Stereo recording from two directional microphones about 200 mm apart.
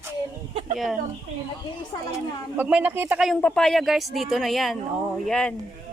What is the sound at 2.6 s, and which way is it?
Speech, 5° right (ahead or behind).